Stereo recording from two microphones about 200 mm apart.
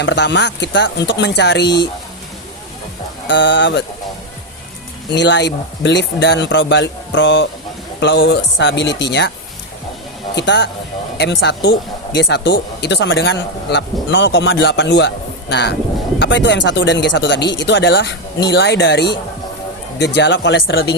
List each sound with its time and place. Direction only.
0.0 s speech: 60° left (ahead or behind)
1.6 s speech: 20° left (ahead or behind)
3.2 s speech: 65° left (ahead or behind)
5.1 s speech: 60° left (ahead or behind)
10.3 s speech: 60° left (ahead or behind)